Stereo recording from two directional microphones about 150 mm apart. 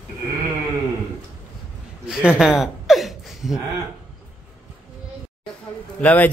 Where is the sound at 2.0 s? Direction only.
5° right (ahead or behind).